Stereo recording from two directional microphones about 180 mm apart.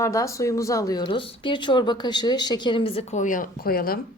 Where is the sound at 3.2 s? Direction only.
45° left (ahead or behind).